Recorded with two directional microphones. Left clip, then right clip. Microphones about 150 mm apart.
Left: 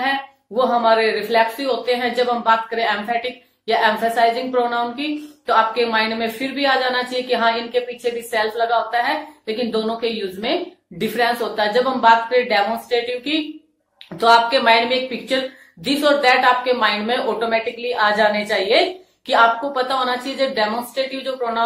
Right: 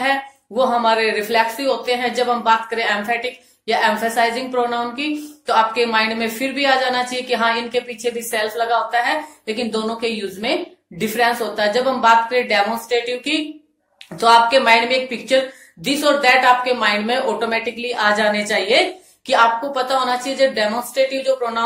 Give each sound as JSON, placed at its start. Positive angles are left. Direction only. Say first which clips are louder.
{"t": 0.6, "sound": "a woman's voice", "louder": "even", "side_deg": -15}